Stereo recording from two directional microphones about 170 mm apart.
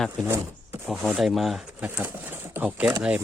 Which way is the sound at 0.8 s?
Centre (ahead or behind).